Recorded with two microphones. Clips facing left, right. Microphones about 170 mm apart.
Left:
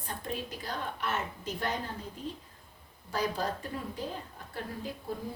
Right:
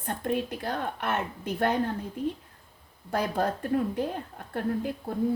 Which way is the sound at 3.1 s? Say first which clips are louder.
Right 5 dB; 60° right (ahead or behind).